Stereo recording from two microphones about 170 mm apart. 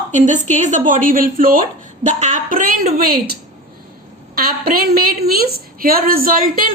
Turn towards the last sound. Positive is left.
turn(degrees=-55)  # may be behind; listen again after turning